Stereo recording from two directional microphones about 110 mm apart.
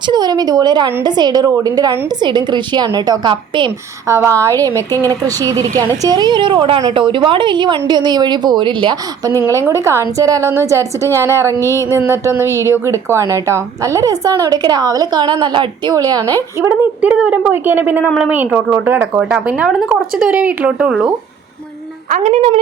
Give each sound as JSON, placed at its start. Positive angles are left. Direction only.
{"t": 0.1, "sound": "a woman's voice", "side_deg": -40}
{"t": 4.0, "sound": "a woman's voice", "side_deg": -25}
{"t": 4.7, "sound": "a woman's voice", "side_deg": 20}
{"t": 5.2, "sound": "a woman's voice", "side_deg": -35}
{"t": 9.6, "sound": "a woman's voice", "side_deg": -25}
{"t": 10.8, "sound": "a woman's voice", "side_deg": 20}
{"t": 11.9, "sound": "a woman's voice", "side_deg": -25}
{"t": 16.6, "sound": "speech", "side_deg": -15}
{"t": 22.2, "sound": "a woman's voice", "side_deg": -90}